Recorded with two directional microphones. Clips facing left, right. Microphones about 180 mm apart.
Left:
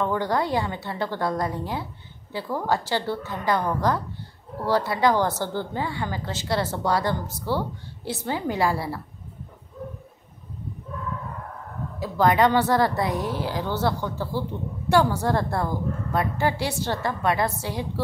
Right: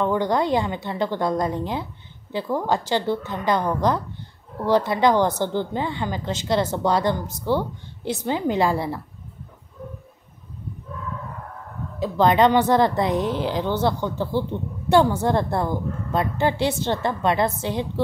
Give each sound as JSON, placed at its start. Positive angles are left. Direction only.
{"t": 0.0, "sound": "a woman's voice", "side_deg": -20}
{"t": 12.0, "sound": "a woman's voice", "side_deg": -20}